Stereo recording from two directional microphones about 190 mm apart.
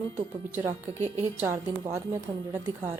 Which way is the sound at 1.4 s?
15° right (ahead or behind).